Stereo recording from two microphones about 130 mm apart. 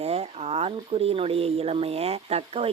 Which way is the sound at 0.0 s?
50° right (ahead or behind).